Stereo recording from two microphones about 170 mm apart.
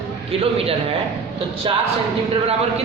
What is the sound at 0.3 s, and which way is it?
A man's voice, 35° right (ahead or behind).